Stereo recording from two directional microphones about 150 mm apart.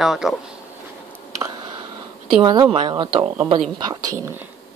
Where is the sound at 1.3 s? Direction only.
30° right (ahead or behind).